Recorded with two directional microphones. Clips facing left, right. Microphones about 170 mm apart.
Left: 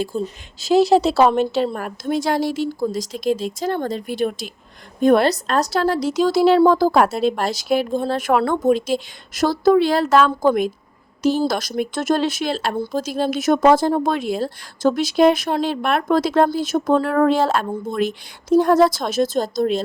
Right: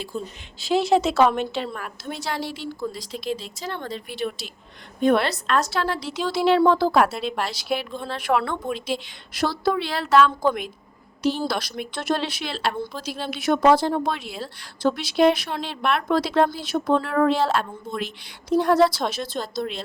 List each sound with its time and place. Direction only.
0.6 s a woman's voice: 40° left (ahead or behind)